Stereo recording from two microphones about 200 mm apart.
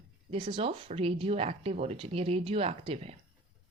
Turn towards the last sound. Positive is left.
turn(degrees=-30)  # may be behind; listen again after turning